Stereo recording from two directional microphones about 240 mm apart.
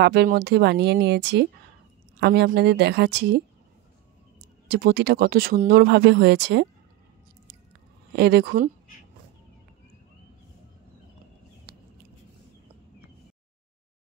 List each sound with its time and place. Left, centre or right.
0.0 s speech: right
4.6 s speech: right
8.2 s speech: right